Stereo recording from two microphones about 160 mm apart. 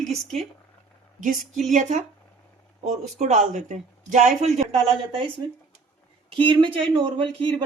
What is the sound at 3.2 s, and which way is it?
Speech, 50° right (ahead or behind).